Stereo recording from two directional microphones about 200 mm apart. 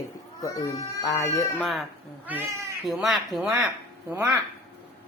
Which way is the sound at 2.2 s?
10° right (ahead or behind).